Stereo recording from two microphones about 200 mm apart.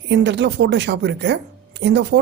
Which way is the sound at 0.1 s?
60° right (ahead or behind).